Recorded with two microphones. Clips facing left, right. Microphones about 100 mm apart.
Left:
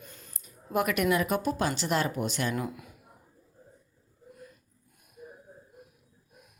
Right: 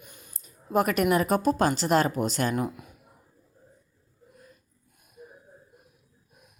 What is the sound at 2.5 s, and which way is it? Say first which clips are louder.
Speech: right 4 dB; 20° right (ahead or behind).